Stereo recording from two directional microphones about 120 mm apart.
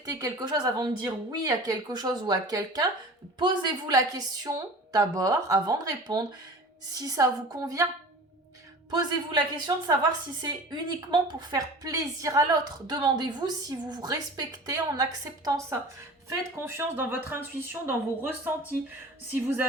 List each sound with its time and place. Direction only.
0.0 s a woman's voice: 30° right (ahead or behind)
8.9 s a woman's voice: 35° right (ahead or behind); by 19.6 s 15° right (ahead or behind)